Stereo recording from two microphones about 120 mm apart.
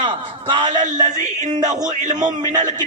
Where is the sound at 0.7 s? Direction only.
90° right.